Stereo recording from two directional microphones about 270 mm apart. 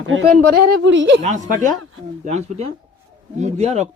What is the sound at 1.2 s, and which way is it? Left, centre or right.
Speech, right.